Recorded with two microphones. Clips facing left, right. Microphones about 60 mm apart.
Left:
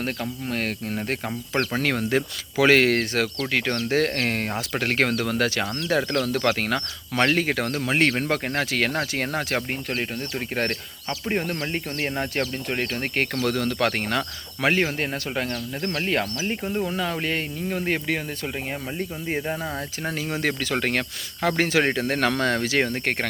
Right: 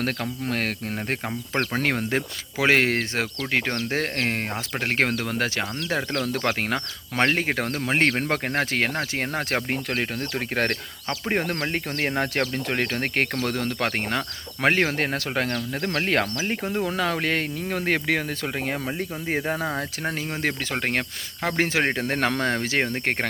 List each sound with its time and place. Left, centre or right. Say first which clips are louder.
0.0 s speech: right 1 dB; right
1.7 s speech: left 1 dB; right
9.0 s speech: left 1 dB; centre
9.6 s speech: right 2 dB; right
13.3 s speech: left 2 dB; right
14.6 s speech: right 1 dB; right
19.4 s speech: right 4 dB; right
20.4 s speech: left 2 dB; centre